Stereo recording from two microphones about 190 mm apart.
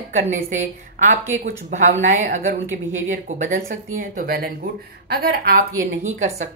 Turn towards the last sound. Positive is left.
turn(degrees=-35)  # may be behind; listen again after turning